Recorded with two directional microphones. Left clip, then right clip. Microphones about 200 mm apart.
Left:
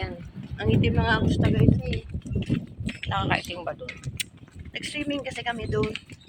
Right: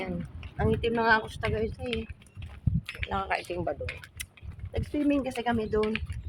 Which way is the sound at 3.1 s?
5° left (ahead or behind).